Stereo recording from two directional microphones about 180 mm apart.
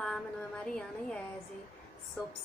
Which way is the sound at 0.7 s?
5° left (ahead or behind).